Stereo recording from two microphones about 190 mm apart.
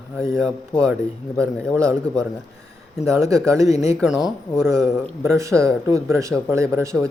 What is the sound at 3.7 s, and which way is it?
Speech, 35° left (ahead or behind).